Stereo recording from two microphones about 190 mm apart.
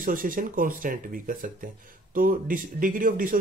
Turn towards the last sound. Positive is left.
turn(degrees=-45)  # may be behind; listen again after turning